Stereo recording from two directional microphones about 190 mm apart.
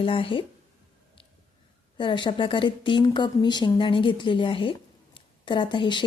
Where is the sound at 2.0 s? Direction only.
25° left (ahead or behind).